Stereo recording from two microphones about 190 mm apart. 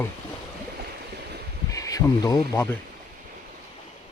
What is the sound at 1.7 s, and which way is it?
Speech, 20° left (ahead or behind).